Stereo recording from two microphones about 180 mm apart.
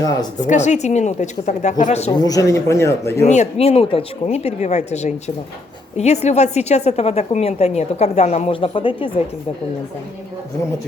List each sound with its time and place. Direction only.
0.3 s a woman's voice: 40° left (ahead or behind)
2.1 s speech: 20° left (ahead or behind)
3.2 s a woman's voice: 40° left (ahead or behind)